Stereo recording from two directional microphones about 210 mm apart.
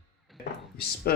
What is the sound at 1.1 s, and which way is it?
Speech, 45° left (ahead or behind).